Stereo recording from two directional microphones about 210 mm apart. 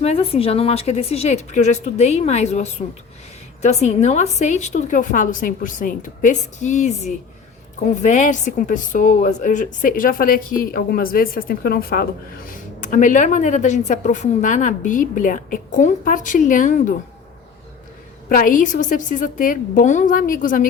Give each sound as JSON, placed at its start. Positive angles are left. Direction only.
{"t": 0.0, "sound": "a woman's voice", "side_deg": 30}
{"t": 18.3, "sound": "a woman's voice", "side_deg": 40}